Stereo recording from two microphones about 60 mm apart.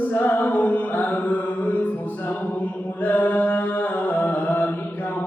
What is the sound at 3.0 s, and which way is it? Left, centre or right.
Mantra, left.